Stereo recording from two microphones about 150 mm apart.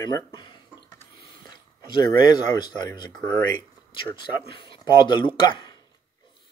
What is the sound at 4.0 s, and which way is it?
Speech, 35° left (ahead or behind).